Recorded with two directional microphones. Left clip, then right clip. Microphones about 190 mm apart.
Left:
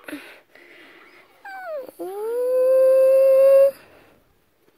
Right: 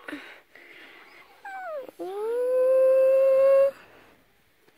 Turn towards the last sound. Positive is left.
turn(degrees=15)  # may be behind; listen again after turning